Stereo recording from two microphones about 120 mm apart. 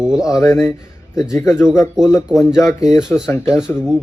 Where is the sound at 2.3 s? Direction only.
5° right (ahead or behind).